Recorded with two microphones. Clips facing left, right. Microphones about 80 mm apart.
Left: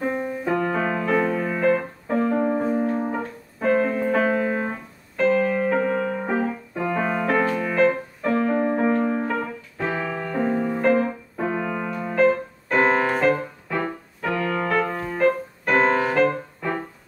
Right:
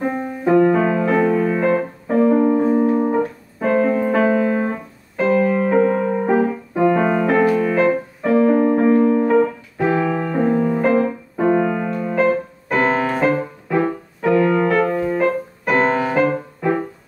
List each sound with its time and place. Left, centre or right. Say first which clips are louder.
0.7 s keyboard: right 5 dB; centre
2.7 s piano: right 7 dB; centre
5.1 s music: right 3 dB; centre
12.3 s keyboard: right 2 dB; centre
13.2 s music: right 2 dB; centre
14.2 s keyboard: right 9 dB; centre
15.0 s music: right 2 dB; centre